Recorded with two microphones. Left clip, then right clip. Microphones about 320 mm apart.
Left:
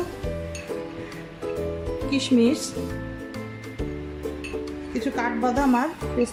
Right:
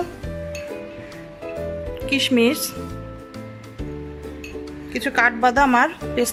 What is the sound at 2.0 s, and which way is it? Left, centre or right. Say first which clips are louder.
Speech: right 4 dB; right.